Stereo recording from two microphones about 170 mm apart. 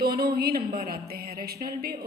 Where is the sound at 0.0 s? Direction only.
65° right (ahead or behind).